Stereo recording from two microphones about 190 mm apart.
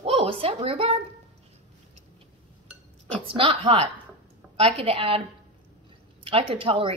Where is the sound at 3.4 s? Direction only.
25° right (ahead or behind).